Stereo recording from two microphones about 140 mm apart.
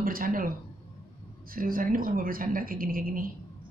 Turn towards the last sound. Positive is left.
turn(degrees=-85)